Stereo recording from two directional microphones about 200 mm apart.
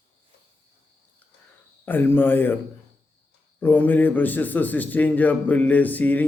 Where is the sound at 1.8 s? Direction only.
10° left (ahead or behind).